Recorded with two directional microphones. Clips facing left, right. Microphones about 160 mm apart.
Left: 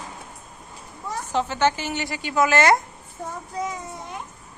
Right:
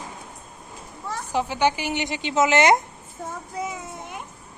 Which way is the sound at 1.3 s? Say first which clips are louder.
Even; 10° right (ahead or behind).